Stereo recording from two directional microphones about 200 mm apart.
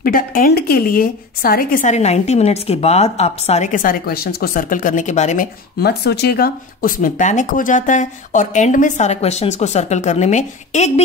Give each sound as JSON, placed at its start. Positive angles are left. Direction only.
{"t": 0.0, "sound": "a woman's voice", "side_deg": 45}
{"t": 5.8, "sound": "speech", "side_deg": 55}